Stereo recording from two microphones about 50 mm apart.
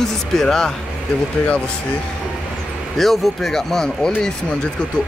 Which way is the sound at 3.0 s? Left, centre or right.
Centre.